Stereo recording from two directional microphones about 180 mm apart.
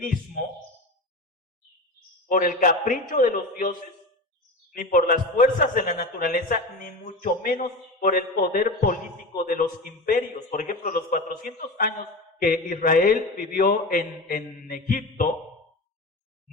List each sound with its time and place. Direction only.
2.2 s a man's voice: 50° left (ahead or behind)